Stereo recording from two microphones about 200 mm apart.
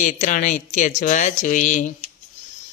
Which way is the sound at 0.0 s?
40° left (ahead or behind).